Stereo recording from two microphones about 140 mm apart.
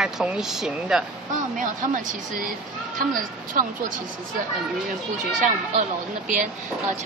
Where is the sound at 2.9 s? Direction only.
80° right.